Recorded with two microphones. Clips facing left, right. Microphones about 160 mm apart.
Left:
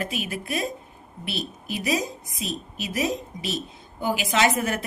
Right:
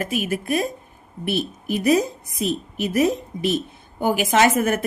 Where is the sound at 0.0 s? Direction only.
45° right (ahead or behind).